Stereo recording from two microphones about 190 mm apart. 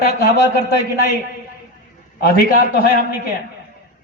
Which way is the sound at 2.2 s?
50° left (ahead or behind).